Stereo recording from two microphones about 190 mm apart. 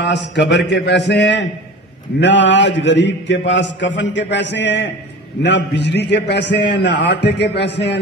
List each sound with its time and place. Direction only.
0.0 s a man's voice: 65° left (ahead or behind)